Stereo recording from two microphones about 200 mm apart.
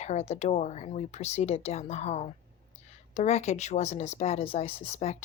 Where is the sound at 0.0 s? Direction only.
35° left (ahead or behind).